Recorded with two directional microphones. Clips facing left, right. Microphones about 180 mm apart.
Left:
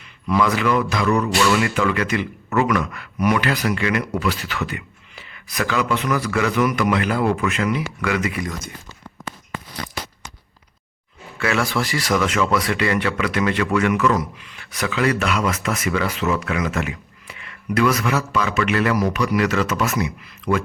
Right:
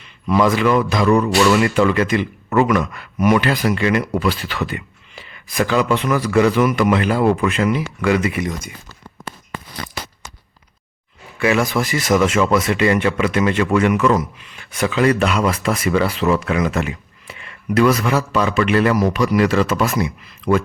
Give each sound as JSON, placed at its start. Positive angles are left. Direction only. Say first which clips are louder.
{"t": 0.0, "sound": "a man's voice", "louder": "right 4 dB", "side_deg": -25}
{"t": 0.9, "sound": "mantra", "louder": "right 5 dB", "side_deg": -30}
{"t": 1.6, "sound": "speech", "louder": "right 5 dB", "side_deg": -30}
{"t": 11.3, "sound": "speech", "louder": "right 4 dB", "side_deg": -15}